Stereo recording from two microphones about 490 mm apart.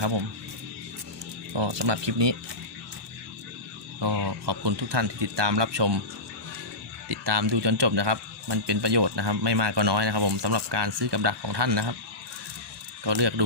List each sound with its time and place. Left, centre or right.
1.5 s a man's voice: right
4.0 s a man's voice: right
7.1 s a man's voice: right
13.1 s a man's voice: right